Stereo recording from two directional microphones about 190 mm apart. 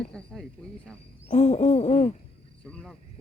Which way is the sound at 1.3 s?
35° left (ahead or behind).